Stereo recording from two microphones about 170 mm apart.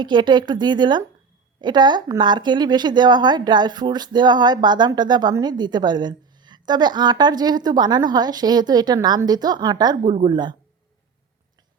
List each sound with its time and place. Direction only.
0.0 s speech: 25° right (ahead or behind)